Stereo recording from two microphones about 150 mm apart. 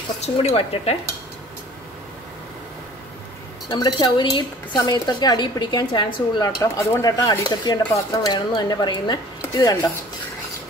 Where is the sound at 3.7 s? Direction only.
30° left (ahead or behind).